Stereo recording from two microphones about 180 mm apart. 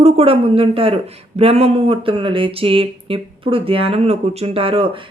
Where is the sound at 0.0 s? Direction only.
30° right (ahead or behind).